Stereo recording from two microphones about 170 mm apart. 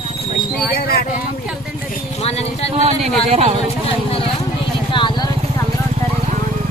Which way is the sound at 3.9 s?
35° left (ahead or behind).